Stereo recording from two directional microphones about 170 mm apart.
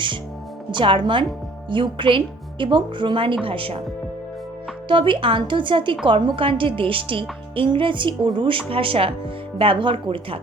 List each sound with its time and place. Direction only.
0.7 s a woman's voice: 30° right (ahead or behind)
4.9 s a woman's voice: 30° right (ahead or behind)